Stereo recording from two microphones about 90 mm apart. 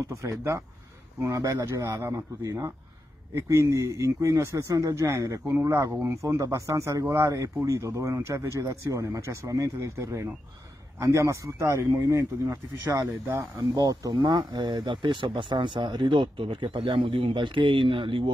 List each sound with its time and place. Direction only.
0.1 s a man's voice: 35° right (ahead or behind)
12.9 s speech: 35° right (ahead or behind)
14.2 s speech: 55° right (ahead or behind)